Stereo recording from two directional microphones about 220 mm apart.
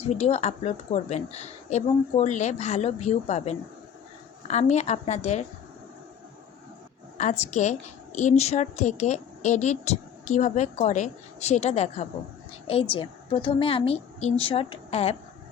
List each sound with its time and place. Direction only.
0.0 s a woman's voice: 30° left (ahead or behind)
7.2 s a woman's voice: 30° left (ahead or behind)